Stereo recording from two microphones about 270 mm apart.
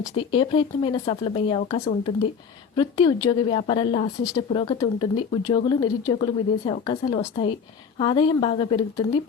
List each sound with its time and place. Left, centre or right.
0.1 s speech: centre